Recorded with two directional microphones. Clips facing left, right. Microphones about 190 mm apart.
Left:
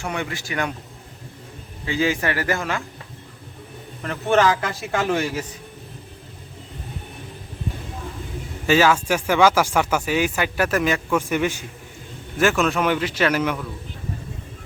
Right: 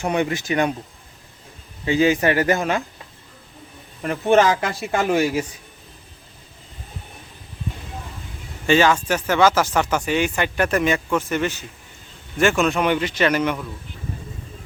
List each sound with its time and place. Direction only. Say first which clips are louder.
0.0 s speech: right 6 dB; 20° right (ahead or behind)
1.8 s speech: right 5 dB; 20° right (ahead or behind)
4.0 s a man's voice: right 2 dB; 15° right (ahead or behind)
8.6 s speech: even; 5° left (ahead or behind)
11.2 s a man's voice: left 1 dB; 10° left (ahead or behind)
12.4 s speech: right 1 dB; centre (ahead or behind)